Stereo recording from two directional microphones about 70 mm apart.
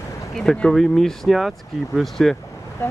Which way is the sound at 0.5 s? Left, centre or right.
Centre.